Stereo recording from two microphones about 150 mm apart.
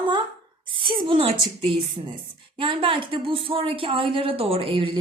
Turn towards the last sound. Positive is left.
turn(degrees=-35)  # may be behind; listen again after turning